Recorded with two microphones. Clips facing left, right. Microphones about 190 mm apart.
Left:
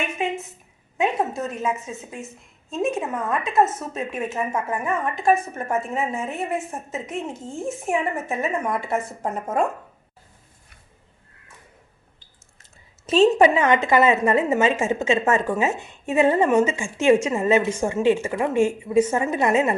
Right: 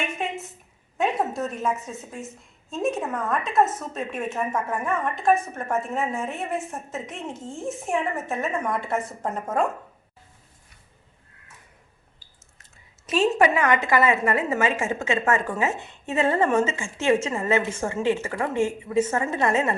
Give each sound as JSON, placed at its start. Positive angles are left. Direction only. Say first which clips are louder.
{"t": 0.9, "sound": "speech", "louder": "left 1 dB", "side_deg": 0}
{"t": 13.1, "sound": "a woman's voice", "louder": "left 5 dB", "side_deg": 25}